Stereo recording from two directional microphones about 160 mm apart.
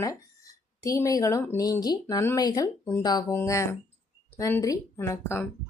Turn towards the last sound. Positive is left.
turn(degrees=15)  # may be behind; listen again after turning